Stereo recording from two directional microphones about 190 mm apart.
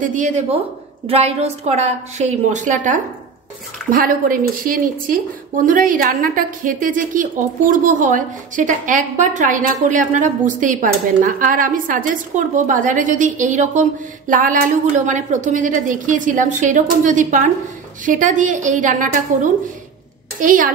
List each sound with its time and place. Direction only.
0.0 s a woman's voice: 40° right (ahead or behind)